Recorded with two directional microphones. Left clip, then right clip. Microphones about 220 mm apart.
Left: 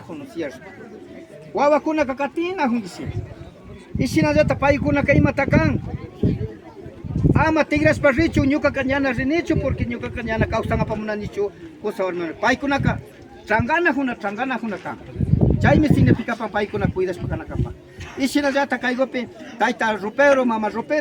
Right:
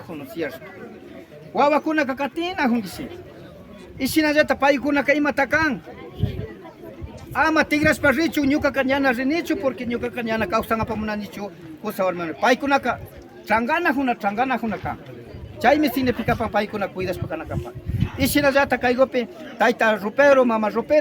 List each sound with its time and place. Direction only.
0.4 s a man's voice: 35° right (ahead or behind)
1.5 s a man's voice: 40° right (ahead or behind)
3.9 s speech: 45° right (ahead or behind)
7.3 s a man's voice: 50° right (ahead or behind); by 21.0 s 30° right (ahead or behind)